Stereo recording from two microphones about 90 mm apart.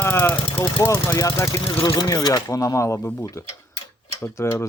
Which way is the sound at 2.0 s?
45° left (ahead or behind).